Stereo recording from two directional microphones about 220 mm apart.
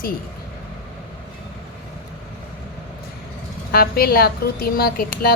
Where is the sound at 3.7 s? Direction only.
45° left (ahead or behind).